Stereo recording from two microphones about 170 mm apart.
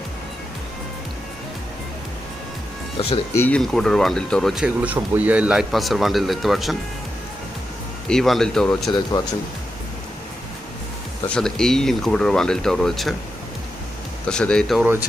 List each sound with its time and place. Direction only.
3.3 s speech: 10° left (ahead or behind)
8.0 s speech: centre (ahead or behind)
9.1 s speech: 30° left (ahead or behind)
11.3 s speech: 5° left (ahead or behind)
14.3 s speech: 5° left (ahead or behind)